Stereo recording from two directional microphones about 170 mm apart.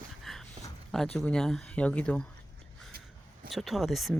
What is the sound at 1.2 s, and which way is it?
Speech, 5° left (ahead or behind).